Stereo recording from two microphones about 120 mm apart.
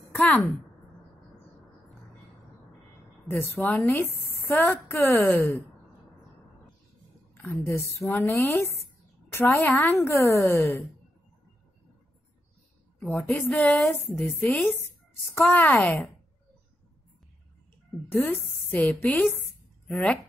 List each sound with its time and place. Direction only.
0.1 s a sound: 15° left (ahead or behind)
3.3 s a woman's voice: 15° left (ahead or behind)
7.3 s a woman's voice: 25° left (ahead or behind)
13.0 s a woman's voice: 10° left (ahead or behind)
18.1 s a woman's voice: 10° left (ahead or behind)